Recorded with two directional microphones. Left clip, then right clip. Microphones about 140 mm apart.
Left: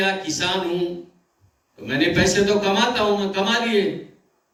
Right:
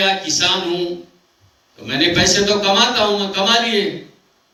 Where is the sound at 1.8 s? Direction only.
35° right (ahead or behind).